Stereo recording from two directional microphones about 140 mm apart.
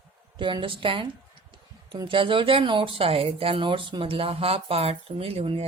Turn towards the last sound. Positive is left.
turn(degrees=-40)  # may be behind; listen again after turning